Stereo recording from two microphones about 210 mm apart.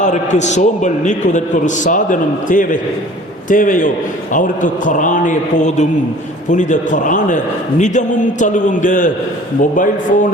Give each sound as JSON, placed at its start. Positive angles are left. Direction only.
{"t": 0.0, "sound": "a man's voice", "side_deg": 35}